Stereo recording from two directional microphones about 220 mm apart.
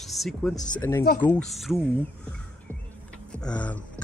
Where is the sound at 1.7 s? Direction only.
5° left (ahead or behind).